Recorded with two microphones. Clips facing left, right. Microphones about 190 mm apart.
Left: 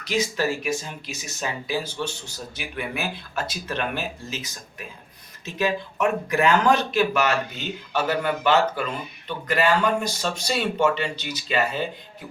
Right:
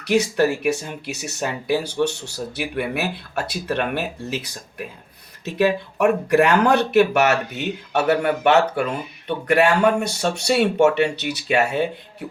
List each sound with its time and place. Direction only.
0.1 s speech: 65° right (ahead or behind)